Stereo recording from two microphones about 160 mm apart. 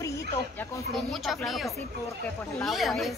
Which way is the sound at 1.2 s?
Centre (ahead or behind).